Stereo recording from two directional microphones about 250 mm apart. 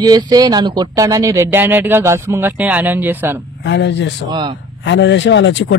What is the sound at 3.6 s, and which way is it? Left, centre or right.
Speech, left.